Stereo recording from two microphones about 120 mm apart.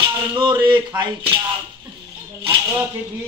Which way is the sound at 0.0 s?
40° right (ahead or behind).